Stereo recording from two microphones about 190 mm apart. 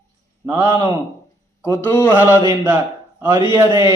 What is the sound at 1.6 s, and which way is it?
Speech, 15° left (ahead or behind).